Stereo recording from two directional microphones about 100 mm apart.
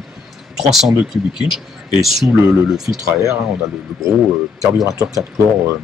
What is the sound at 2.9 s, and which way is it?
Speech, 20° right (ahead or behind).